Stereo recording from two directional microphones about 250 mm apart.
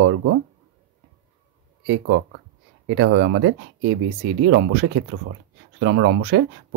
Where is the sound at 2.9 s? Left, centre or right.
Right.